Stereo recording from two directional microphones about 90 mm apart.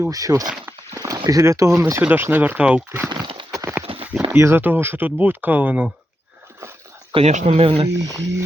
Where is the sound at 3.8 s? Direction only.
90° right.